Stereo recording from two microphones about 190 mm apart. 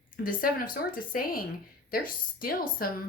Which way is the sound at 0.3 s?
45° left (ahead or behind).